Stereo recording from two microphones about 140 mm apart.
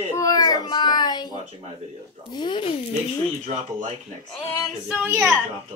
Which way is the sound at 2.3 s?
35° left (ahead or behind).